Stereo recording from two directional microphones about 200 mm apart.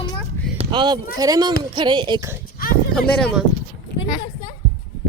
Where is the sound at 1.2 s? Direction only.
20° right (ahead or behind).